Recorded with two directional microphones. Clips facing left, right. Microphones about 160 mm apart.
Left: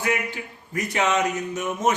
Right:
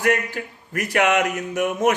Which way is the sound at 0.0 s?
70° right (ahead or behind).